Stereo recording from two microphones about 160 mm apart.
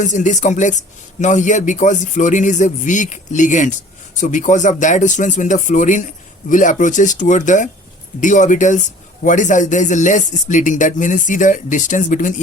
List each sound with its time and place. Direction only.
0.0 s speech: 50° left (ahead or behind)